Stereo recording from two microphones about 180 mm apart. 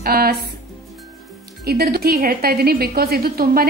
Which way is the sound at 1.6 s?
60° right (ahead or behind).